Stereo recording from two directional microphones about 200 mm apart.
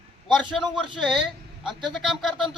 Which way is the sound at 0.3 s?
Centre (ahead or behind).